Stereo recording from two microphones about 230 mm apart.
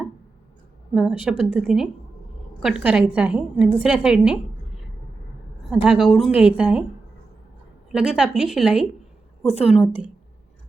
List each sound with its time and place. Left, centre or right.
0.9 s a woman's voice: centre
5.8 s a woman's voice: centre
7.9 s a woman's voice: centre
9.4 s a woman's voice: left
9.6 s a woman's voice: centre